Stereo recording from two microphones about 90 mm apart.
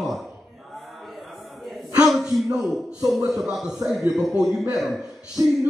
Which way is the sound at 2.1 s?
Centre (ahead or behind).